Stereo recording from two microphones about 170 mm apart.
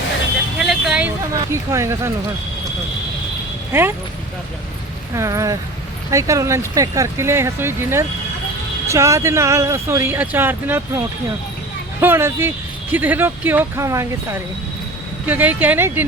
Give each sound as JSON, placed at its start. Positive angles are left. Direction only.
{"t": 0.6, "sound": "vehicle", "side_deg": -5}
{"t": 1.3, "sound": "speech", "side_deg": -15}
{"t": 3.7, "sound": "speech", "side_deg": -15}
{"t": 5.1, "sound": "speech", "side_deg": -20}